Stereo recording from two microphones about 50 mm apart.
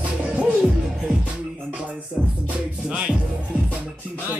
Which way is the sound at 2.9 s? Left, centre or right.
Right.